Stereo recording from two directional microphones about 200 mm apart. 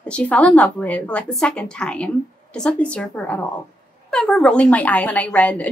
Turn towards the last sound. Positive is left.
turn(degrees=5)  # may be behind; listen again after turning